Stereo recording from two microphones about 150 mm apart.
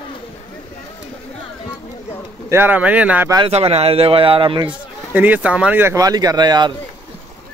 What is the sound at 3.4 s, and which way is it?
Speech, 40° right (ahead or behind).